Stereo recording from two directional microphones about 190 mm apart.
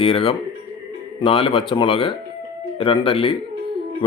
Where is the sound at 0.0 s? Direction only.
30° left (ahead or behind).